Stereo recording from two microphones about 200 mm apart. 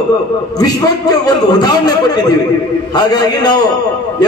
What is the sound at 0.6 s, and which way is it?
A man's voice, 20° left (ahead or behind).